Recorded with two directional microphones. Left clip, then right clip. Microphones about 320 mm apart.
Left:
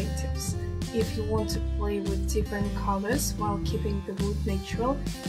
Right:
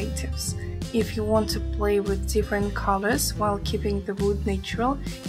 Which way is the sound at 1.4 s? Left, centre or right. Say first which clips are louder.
Right 5 dB; right.